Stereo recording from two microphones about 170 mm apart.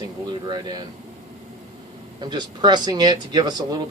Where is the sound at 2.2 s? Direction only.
25° right (ahead or behind).